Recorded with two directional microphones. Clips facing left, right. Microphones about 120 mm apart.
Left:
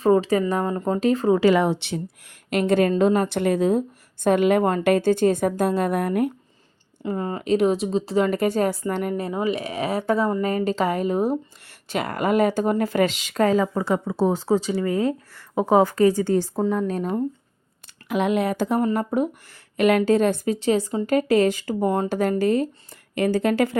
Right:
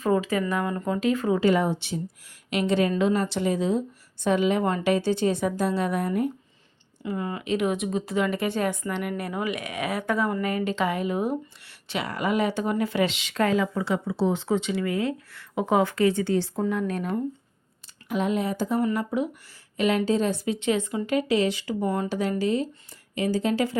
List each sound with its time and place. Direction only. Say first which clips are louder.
0.0 s a woman's voice: left 5 dB; 35° left (ahead or behind)
1.4 s speech: left 4 dB; 85° left; by 2.3 s 70° left (ahead or behind)
2.5 s speech: left 4 dB; 45° left (ahead or behind)
7.0 s a woman's voice: left 4 dB; 40° left (ahead or behind)
9.1 s a woman's voice: left 5 dB; 25° left (ahead or behind)
18.1 s speech: left 4 dB; 75° left (ahead or behind)
18.9 s speech: left 4 dB; 45° left (ahead or behind)